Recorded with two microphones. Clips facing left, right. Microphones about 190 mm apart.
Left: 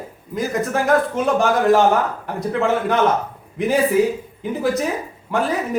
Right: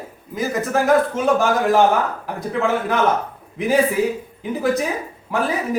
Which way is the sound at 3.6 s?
Centre (ahead or behind).